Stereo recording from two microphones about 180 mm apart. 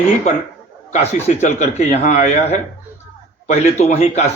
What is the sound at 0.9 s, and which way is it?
A man's voice, 40° left (ahead or behind).